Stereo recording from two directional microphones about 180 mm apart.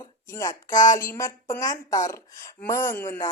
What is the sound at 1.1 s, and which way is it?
Speech, 15° left (ahead or behind).